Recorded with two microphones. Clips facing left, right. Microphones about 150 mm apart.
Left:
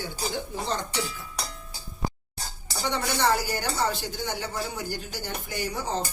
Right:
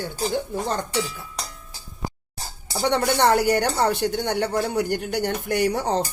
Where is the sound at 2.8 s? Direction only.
65° right (ahead or behind).